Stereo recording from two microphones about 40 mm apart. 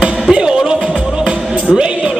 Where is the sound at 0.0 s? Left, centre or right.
Right.